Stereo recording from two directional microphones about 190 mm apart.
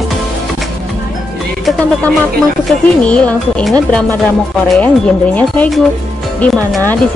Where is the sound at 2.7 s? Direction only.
5° left (ahead or behind).